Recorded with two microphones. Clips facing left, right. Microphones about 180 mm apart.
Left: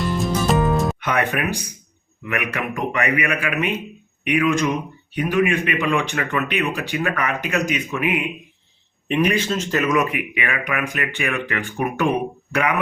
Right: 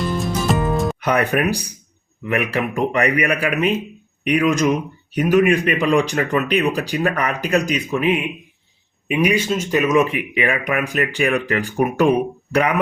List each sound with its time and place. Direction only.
0.0 s music: centre (ahead or behind)
0.9 s speech: 35° right (ahead or behind)
9.0 s speech: 10° right (ahead or behind); by 12.7 s 35° right (ahead or behind)